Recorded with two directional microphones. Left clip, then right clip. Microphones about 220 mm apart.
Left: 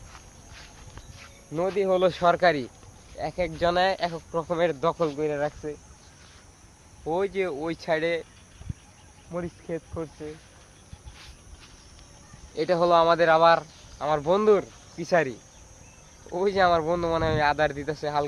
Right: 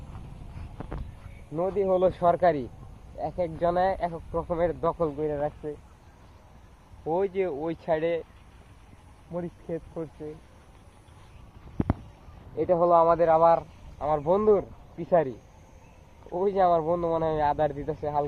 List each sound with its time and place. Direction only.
1.5 s speech: 5° left (ahead or behind)
3.6 s speech: 5° left (ahead or behind)
4.1 s speech: 15° left (ahead or behind)
5.3 s speech: centre (ahead or behind)
7.0 s speech: 10° right (ahead or behind)
9.3 s speech: 20° right (ahead or behind)
12.5 s speech: 10° left (ahead or behind)
12.8 s speech: 30° left (ahead or behind)
13.5 s speech: 5° left (ahead or behind)
14.9 s speech: 5° right (ahead or behind)